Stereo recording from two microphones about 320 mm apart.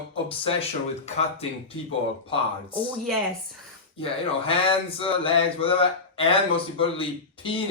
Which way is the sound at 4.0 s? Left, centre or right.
Centre.